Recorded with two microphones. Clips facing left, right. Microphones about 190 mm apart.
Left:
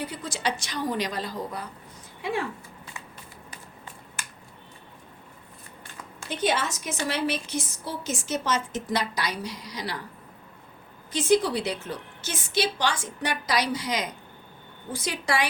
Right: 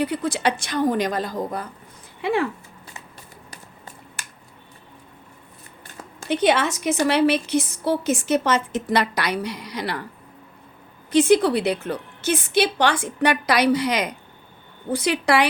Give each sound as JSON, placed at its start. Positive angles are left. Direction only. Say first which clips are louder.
{"t": 0.0, "sound": "a woman's voice", "louder": "right 8 dB", "side_deg": -60}
{"t": 6.2, "sound": "a woman's voice", "louder": "right 7 dB", "side_deg": -70}
{"t": 11.1, "sound": "a woman's voice", "louder": "right 6 dB", "side_deg": -65}